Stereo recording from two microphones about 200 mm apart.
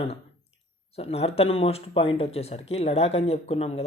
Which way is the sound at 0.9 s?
30° left (ahead or behind).